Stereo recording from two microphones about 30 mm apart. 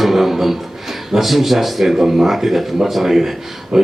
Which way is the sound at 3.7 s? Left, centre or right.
Centre.